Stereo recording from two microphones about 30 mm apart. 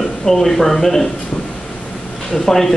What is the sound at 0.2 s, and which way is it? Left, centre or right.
Speech, centre.